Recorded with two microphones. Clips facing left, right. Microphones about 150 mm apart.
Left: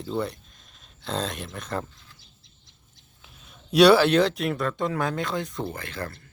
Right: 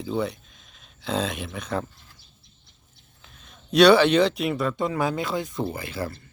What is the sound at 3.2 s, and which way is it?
Speech, 5° left (ahead or behind).